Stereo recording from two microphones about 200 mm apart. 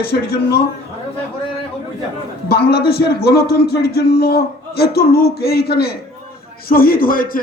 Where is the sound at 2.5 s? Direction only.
55° left (ahead or behind).